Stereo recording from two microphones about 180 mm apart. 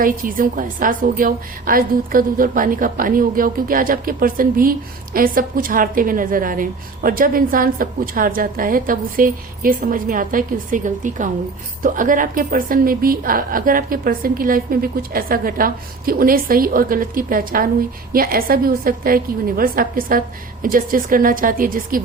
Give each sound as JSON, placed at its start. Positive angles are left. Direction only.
{"t": 0.0, "sound": "a woman's voice", "side_deg": -50}